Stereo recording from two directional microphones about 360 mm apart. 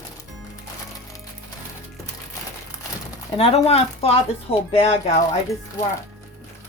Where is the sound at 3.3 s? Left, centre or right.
Centre.